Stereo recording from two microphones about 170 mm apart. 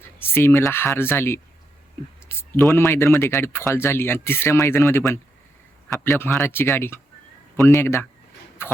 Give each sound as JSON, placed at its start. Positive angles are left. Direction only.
{"t": 0.2, "sound": "speech", "side_deg": 15}
{"t": 2.3, "sound": "a sound", "side_deg": 15}
{"t": 2.7, "sound": "speech", "side_deg": 15}